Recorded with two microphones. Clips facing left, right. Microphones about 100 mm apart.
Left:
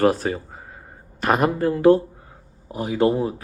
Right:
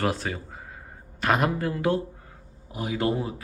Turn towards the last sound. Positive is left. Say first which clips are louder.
# left 7 dB
turn(degrees=35)  # may be behind; listen again after turning